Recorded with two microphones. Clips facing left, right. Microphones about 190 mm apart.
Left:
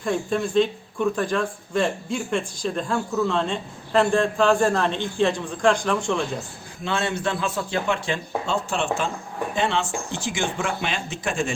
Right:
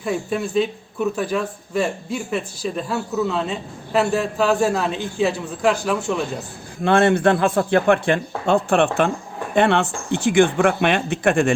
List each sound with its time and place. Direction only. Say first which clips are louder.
0.0 s speech: right 1 dB; 5° right (ahead or behind)
6.8 s speech: right 10 dB; 55° right (ahead or behind)